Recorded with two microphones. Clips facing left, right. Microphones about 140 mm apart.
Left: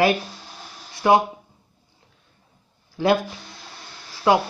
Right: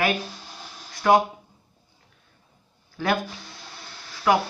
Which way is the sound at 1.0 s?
20° left (ahead or behind).